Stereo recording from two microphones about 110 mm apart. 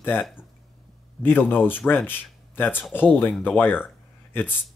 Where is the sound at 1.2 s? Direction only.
20° left (ahead or behind).